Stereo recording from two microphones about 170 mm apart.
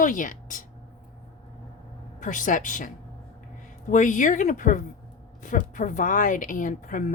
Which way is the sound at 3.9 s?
50° left (ahead or behind).